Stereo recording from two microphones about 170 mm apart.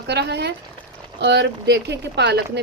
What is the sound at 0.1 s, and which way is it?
A woman's voice, 80° right.